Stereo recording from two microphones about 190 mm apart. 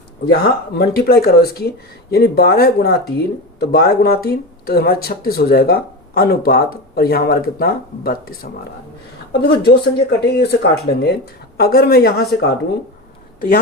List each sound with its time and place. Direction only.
0.3 s speech: 55° left (ahead or behind)
9.4 s speech: 55° left (ahead or behind)